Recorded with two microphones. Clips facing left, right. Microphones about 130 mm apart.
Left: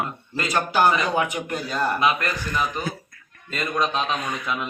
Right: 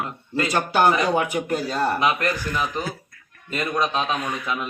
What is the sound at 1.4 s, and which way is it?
Speech, 30° right (ahead or behind).